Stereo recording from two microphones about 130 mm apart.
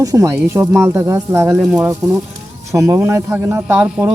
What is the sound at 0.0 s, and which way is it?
Speech, 25° right (ahead or behind).